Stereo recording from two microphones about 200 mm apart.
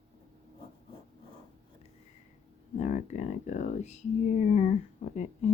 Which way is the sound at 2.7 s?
35° left (ahead or behind).